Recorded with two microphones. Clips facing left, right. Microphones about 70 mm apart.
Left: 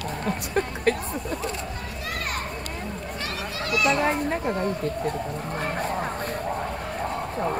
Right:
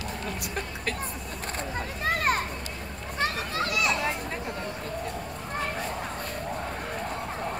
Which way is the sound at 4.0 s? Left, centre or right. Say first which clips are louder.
Left 7 dB; left.